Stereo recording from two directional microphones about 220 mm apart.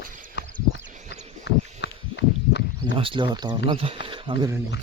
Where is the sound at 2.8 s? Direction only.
20° right (ahead or behind).